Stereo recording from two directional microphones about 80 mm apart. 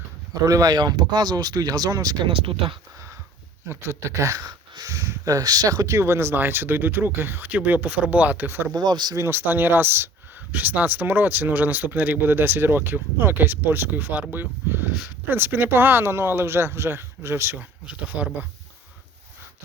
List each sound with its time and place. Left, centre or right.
0.4 s speech: right
0.8 s speech: right
3.7 s speech: right
4.2 s speech: right
8.7 s speech: right
9.1 s speech: right
17.6 s speech: centre